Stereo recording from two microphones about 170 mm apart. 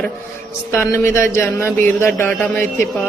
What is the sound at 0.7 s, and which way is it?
Speech, 15° left (ahead or behind).